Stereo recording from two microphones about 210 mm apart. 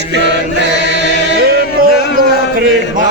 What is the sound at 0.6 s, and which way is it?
Chant, 60° right (ahead or behind).